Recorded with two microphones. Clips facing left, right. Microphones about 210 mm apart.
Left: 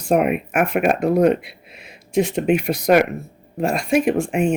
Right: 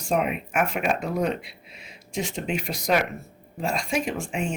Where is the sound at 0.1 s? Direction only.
60° left (ahead or behind).